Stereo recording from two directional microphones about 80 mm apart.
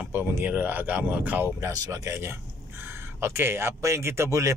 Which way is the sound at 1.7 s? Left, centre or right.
Right.